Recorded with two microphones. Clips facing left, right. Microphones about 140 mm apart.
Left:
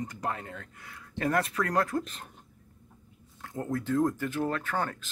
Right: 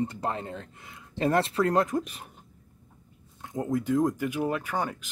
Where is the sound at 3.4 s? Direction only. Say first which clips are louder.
Right 4 dB; 20° right (ahead or behind).